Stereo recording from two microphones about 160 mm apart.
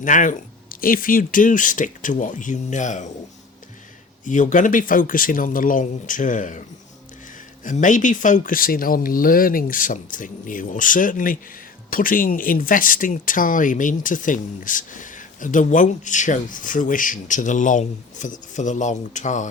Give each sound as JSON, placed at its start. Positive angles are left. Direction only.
{"t": 0.0, "sound": "speech", "side_deg": 55}
{"t": 4.3, "sound": "speech", "side_deg": 50}
{"t": 7.6, "sound": "speech", "side_deg": 55}